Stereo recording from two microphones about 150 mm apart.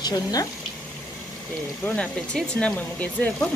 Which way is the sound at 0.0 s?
25° left (ahead or behind).